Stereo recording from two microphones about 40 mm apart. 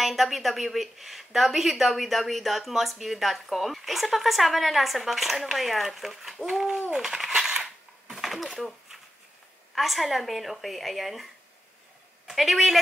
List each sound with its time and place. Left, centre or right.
0.0 s a woman's voice: centre
6.5 s a sound: centre
7.3 s coin: centre
7.6 s typing: centre
9.8 s a woman's voice: centre
12.3 s a woman's voice: centre